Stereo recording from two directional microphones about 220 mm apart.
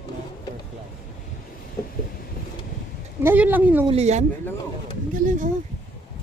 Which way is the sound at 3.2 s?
10° right (ahead or behind).